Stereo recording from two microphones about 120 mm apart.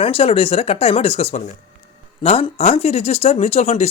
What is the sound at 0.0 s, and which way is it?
Speech, 55° left (ahead or behind).